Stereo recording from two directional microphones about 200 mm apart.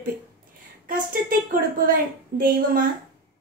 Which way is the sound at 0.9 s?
45° right (ahead or behind).